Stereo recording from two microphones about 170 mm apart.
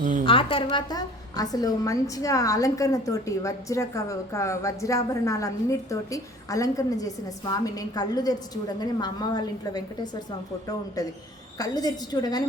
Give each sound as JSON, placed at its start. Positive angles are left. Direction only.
{"t": 0.3, "sound": "a woman's voice", "side_deg": 30}